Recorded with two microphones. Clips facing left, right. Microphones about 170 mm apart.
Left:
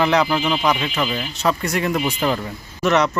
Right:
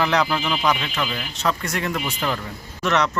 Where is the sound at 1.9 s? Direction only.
20° left (ahead or behind).